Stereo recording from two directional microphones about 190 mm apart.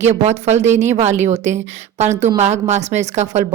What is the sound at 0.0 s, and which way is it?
Speech, 35° right (ahead or behind).